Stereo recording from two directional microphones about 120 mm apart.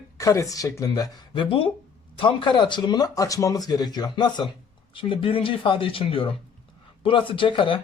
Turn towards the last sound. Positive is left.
turn(degrees=45)  # may be behind; listen again after turning